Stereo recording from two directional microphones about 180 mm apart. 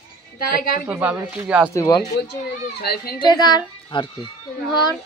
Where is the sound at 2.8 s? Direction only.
60° left (ahead or behind).